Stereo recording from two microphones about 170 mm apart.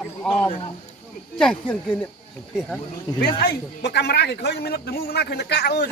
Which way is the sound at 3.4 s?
75° left (ahead or behind).